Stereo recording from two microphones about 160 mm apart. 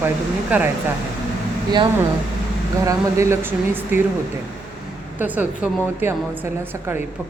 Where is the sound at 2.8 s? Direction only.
20° right (ahead or behind).